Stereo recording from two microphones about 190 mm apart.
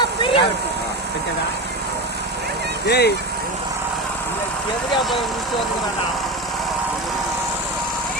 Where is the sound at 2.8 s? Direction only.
60° left (ahead or behind).